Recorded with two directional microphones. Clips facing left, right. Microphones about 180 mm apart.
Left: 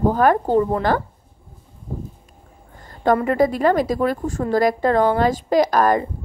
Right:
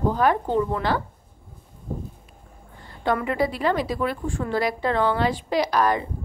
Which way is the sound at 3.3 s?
45° left (ahead or behind).